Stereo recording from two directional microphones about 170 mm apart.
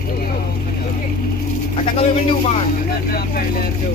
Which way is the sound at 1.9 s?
35° left (ahead or behind).